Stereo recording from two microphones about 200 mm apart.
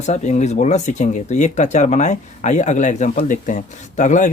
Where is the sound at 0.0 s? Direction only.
35° left (ahead or behind).